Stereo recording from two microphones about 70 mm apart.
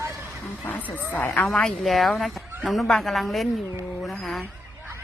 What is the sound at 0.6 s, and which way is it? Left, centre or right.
Speech, left.